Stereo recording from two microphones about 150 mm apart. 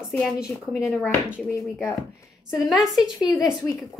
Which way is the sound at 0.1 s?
Centre (ahead or behind).